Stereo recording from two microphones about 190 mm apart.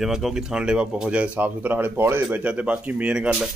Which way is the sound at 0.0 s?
Centre (ahead or behind).